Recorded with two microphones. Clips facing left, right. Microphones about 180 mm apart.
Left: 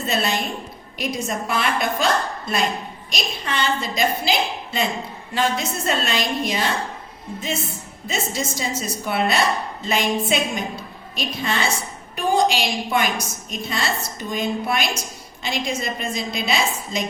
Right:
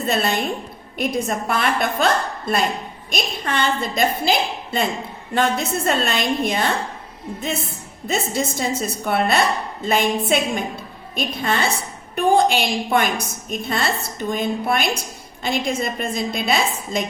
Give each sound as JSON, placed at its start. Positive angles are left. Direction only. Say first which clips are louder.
{"t": 0.1, "sound": "a woman's voice", "louder": "right 2 dB", "side_deg": -55}
{"t": 3.1, "sound": "a woman's voice", "louder": "right 3 dB", "side_deg": -55}